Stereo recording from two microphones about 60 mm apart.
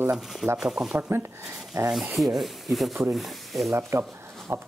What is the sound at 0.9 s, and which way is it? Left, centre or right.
Speech, right.